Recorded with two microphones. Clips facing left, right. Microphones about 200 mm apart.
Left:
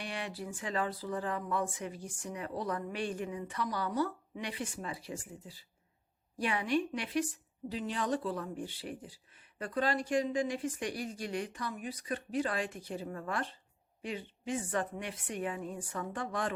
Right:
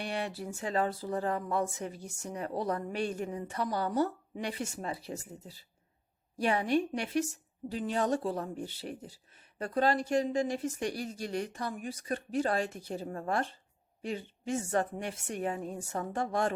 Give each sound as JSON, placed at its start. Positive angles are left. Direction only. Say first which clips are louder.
{"t": 0.4, "sound": "a woman's voice", "louder": "right 3 dB", "side_deg": -40}